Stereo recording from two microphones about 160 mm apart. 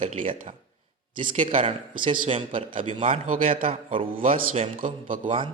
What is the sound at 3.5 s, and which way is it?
Speech, 35° right (ahead or behind).